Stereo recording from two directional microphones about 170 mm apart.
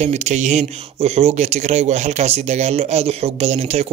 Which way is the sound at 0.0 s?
40° right (ahead or behind).